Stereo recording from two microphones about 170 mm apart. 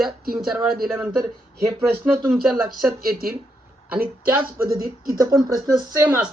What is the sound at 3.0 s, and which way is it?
Speech, 60° right (ahead or behind).